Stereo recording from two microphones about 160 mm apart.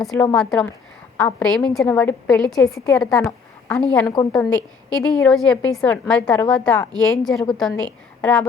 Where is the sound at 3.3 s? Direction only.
5° left (ahead or behind).